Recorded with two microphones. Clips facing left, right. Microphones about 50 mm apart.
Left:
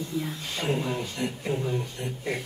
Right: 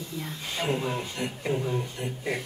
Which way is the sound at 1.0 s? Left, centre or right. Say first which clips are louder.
Left 1 dB; right.